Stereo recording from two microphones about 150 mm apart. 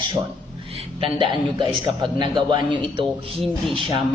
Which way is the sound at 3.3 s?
Centre (ahead or behind).